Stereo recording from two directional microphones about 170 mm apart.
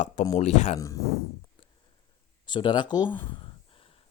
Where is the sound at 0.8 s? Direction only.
20° left (ahead or behind).